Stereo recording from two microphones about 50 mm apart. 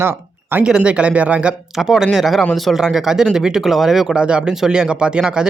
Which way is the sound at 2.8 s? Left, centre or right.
Centre.